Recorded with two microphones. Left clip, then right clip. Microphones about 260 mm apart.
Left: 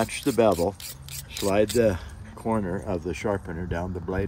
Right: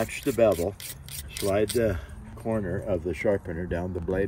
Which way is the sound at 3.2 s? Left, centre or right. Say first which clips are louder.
Right 3 dB; centre.